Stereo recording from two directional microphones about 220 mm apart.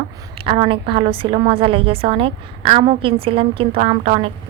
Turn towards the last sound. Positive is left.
turn(degrees=-25)  # may be behind; listen again after turning